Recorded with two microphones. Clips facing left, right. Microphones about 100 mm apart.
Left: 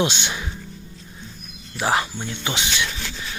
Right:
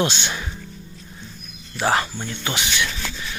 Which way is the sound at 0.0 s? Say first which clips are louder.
Even; 15° left (ahead or behind).